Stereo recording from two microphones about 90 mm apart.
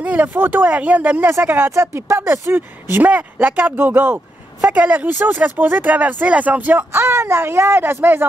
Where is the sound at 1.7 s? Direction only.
35° right (ahead or behind).